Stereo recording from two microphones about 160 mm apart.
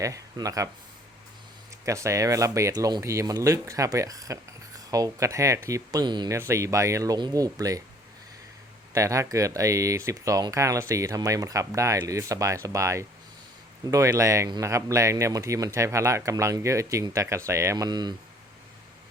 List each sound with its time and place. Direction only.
0.0 s speech: 20° right (ahead or behind)
1.8 s speech: 20° right (ahead or behind)
9.0 s speech: 20° right (ahead or behind)